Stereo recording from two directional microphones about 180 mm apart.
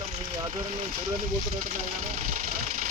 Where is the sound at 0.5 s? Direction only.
45° right (ahead or behind).